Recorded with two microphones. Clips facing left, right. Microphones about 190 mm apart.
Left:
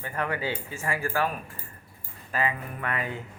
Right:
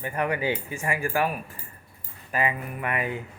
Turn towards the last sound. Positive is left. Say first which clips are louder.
# right 3 dB
turn(degrees=-15)  # may be behind; listen again after turning